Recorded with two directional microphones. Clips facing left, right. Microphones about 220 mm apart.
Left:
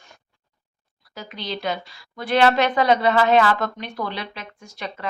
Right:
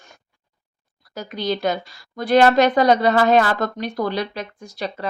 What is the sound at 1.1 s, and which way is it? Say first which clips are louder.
Speech: right 7 dB; 45° right (ahead or behind).